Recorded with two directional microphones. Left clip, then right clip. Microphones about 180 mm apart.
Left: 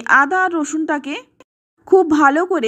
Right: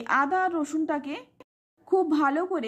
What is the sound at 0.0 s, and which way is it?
Speech, 30° left (ahead or behind).